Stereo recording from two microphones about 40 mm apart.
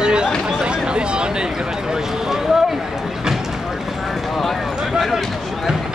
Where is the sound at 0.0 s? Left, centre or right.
Right.